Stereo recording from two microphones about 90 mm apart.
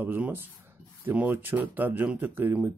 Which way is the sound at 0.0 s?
20° right (ahead or behind).